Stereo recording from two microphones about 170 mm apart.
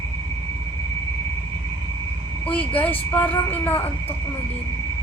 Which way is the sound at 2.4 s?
10° left (ahead or behind).